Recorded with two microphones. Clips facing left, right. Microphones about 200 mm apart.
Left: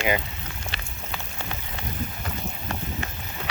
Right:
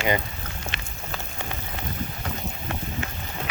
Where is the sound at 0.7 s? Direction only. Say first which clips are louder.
Right 1 dB; 35° left (ahead or behind).